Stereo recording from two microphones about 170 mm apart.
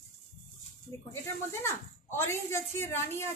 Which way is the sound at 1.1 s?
15° left (ahead or behind).